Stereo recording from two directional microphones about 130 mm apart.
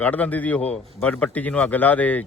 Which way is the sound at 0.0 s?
10° left (ahead or behind).